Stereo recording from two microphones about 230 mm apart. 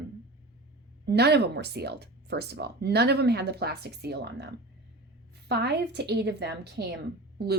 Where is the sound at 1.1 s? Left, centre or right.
Right.